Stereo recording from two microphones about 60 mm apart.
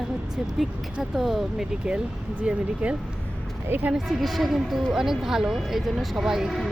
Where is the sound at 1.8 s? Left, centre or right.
Centre.